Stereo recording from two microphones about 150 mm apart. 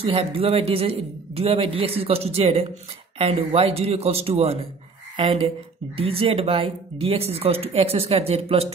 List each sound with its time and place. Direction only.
0.0 s speech: 40° right (ahead or behind)